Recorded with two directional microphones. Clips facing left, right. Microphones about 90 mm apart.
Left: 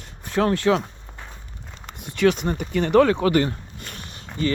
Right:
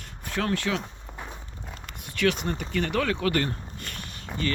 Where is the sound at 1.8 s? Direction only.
20° left (ahead or behind).